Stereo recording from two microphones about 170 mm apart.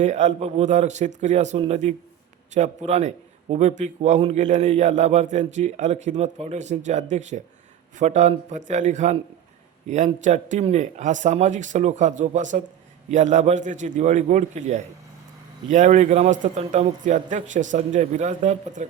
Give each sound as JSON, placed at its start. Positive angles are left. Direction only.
{"t": 0.0, "sound": "a man's voice", "side_deg": -45}